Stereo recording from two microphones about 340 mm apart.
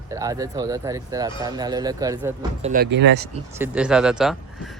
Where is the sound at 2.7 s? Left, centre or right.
Right.